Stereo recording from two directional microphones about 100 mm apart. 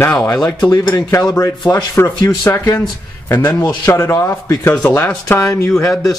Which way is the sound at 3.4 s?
45° left (ahead or behind).